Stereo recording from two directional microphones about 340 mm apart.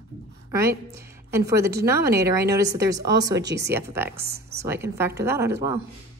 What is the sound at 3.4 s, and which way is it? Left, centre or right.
Speech, right.